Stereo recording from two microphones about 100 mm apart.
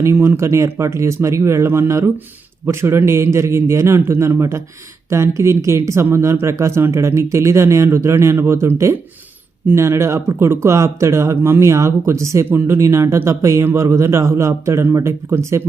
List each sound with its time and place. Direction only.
0.0 s speech: 25° right (ahead or behind)